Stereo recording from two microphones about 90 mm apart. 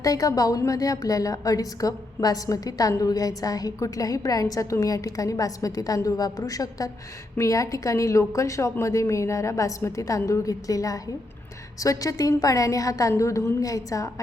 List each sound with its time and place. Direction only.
0.0 s a woman's voice: 40° left (ahead or behind)